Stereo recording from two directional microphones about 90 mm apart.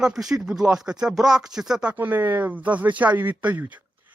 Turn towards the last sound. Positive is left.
turn(degrees=-15)  # may be behind; listen again after turning